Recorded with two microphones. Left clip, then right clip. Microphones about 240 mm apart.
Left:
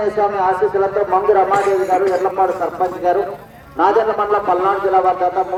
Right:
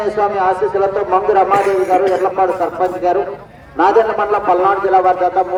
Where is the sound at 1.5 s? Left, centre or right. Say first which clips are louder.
Right 2 dB; right.